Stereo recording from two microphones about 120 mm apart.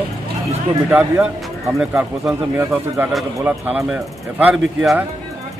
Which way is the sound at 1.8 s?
5° right (ahead or behind).